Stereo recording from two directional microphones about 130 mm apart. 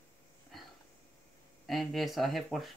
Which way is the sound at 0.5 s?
Centre (ahead or behind).